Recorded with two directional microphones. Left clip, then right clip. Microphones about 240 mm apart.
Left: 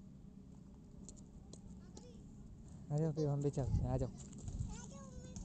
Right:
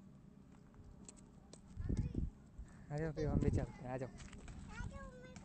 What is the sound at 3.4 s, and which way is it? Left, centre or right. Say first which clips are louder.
Speech: left 2 dB; centre.